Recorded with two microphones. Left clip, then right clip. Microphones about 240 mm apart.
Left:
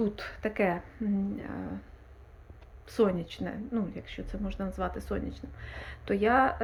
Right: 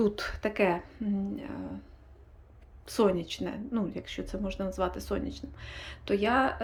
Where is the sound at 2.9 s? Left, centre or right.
Centre.